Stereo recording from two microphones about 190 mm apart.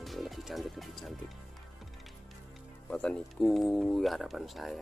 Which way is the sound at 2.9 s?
5° left (ahead or behind).